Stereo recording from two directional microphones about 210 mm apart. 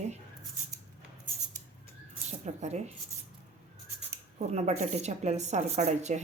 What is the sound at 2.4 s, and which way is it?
Speech, 30° right (ahead or behind).